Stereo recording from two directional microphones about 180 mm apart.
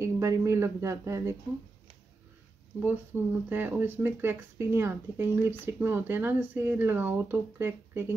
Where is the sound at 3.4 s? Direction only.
10° right (ahead or behind).